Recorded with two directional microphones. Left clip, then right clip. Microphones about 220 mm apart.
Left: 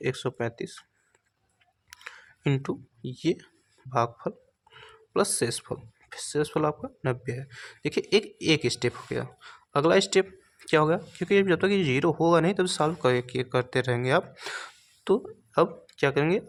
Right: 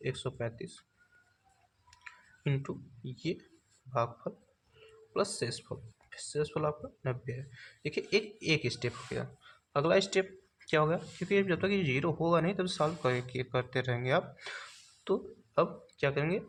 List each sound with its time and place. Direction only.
0.0 s speech: 50° left (ahead or behind)
1.9 s a sound: 50° left (ahead or behind)
3.9 s speech: 50° left (ahead or behind)